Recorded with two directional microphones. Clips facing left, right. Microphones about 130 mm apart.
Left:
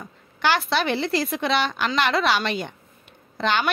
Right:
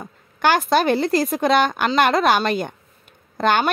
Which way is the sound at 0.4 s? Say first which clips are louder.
Right 5 dB; 45° right (ahead or behind).